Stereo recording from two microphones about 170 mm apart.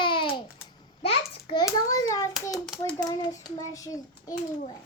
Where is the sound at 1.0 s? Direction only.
30° left (ahead or behind).